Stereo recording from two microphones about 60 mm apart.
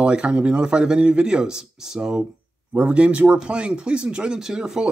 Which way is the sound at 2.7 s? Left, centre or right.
Right.